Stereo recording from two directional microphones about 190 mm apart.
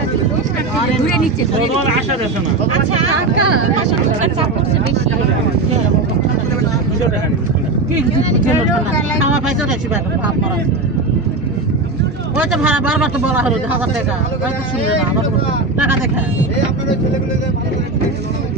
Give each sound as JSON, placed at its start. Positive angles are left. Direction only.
{"t": 12.5, "sound": "speech", "side_deg": -10}